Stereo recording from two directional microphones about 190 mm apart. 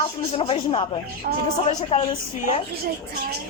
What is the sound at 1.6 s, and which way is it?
Speech, 30° left (ahead or behind).